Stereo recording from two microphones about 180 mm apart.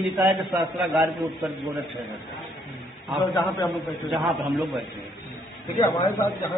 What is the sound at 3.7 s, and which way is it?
Speech, centre (ahead or behind).